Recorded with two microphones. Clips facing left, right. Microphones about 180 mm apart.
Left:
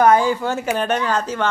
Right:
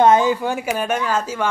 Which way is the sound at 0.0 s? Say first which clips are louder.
Right 1 dB; 20° right (ahead or behind).